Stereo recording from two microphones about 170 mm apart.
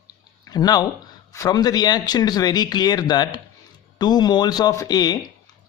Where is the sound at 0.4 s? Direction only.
20° left (ahead or behind).